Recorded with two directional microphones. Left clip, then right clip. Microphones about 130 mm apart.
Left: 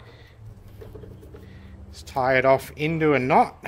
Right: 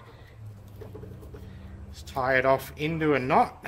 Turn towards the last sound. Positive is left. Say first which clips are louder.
# left 4 dB
turn(degrees=45)  # may be behind; listen again after turning